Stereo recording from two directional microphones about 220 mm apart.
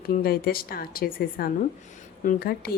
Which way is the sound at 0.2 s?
45° left (ahead or behind).